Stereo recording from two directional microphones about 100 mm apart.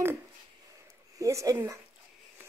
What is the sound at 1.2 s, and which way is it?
Speech, 30° right (ahead or behind).